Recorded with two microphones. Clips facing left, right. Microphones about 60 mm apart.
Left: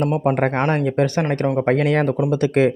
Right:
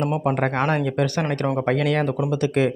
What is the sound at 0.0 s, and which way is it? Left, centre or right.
Speech, left.